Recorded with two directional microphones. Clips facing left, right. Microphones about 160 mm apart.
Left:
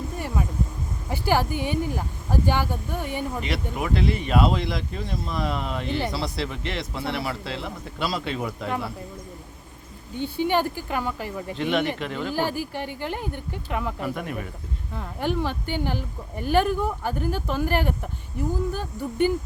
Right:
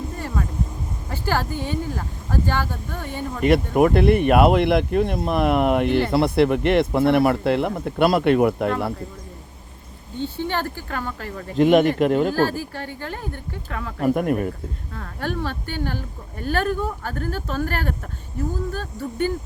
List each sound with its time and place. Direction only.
0.2 s a sound: 15° left (ahead or behind)
1.1 s speech: 15° left (ahead or behind)
3.4 s speech: 50° right (ahead or behind)
10.2 s speech: 15° left (ahead or behind)
11.5 s speech: 45° right (ahead or behind)
12.3 s speech: 15° left (ahead or behind)
14.0 s speech: 50° right (ahead or behind)
14.9 s speech: 15° left (ahead or behind)